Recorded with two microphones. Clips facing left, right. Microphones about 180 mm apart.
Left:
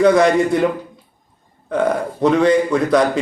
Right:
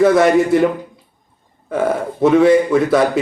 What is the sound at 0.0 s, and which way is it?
Speech, 5° right (ahead or behind).